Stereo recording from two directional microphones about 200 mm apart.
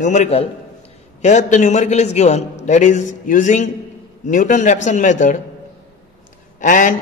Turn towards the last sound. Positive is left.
turn(degrees=40)  # may be behind; listen again after turning